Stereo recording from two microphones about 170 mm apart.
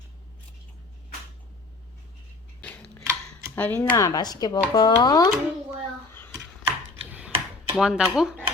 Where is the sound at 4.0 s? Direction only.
20° left (ahead or behind).